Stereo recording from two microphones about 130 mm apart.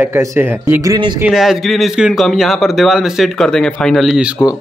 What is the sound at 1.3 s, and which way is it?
A man's voice, centre (ahead or behind).